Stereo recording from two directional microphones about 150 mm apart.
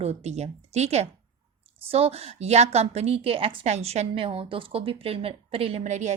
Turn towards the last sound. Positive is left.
turn(degrees=-50)  # may be behind; listen again after turning